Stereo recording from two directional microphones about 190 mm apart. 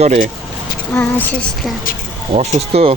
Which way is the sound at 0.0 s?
40° right (ahead or behind).